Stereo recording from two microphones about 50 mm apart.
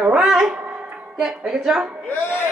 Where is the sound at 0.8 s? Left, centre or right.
Right.